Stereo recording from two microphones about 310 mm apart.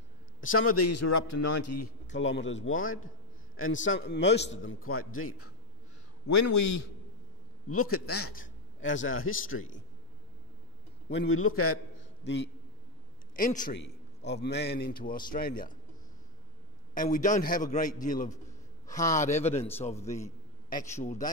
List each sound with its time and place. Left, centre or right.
0.4 s a man's voice: left
2.1 s a man's voice: left
6.2 s a man's voice: left
7.7 s a man's voice: left
11.1 s a man's voice: left
12.2 s a man's voice: left
16.9 s a man's voice: left
20.9 s a man's voice: left